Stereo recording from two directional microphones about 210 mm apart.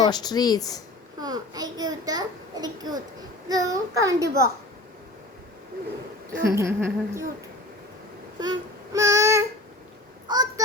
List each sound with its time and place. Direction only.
0.0 s speech: 20° left (ahead or behind)
1.2 s a child's voice: 20° right (ahead or behind)
6.6 s a child's voice: 15° right (ahead or behind)
8.4 s a sound: 20° right (ahead or behind)